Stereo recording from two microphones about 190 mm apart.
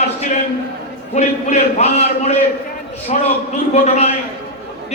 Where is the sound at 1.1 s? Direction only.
35° left (ahead or behind).